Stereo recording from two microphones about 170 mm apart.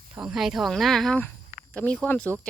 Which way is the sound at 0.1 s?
5° right (ahead or behind).